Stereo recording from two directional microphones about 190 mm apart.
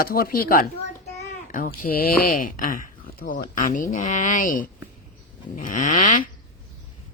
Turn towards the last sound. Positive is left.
turn(degrees=45)  # may be behind; listen again after turning